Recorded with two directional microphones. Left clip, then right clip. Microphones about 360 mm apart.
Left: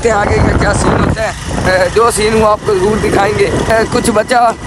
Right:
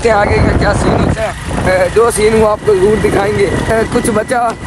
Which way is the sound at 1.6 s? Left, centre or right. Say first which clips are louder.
Even; centre.